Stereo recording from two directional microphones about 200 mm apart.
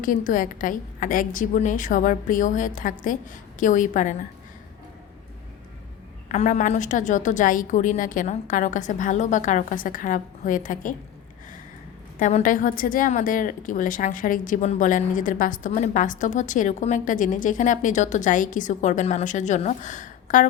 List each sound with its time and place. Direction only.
0.0 s a woman's voice: 45° left (ahead or behind)
6.2 s a woman's voice: 35° left (ahead or behind)
12.2 s a woman's voice: 40° left (ahead or behind)